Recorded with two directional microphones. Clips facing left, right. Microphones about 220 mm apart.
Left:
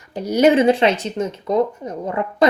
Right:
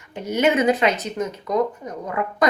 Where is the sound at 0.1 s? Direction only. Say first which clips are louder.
Left 5 dB; 35° left (ahead or behind).